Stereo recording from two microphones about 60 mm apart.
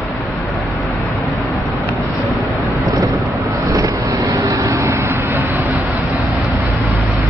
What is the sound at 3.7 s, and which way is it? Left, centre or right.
Vehicle, right.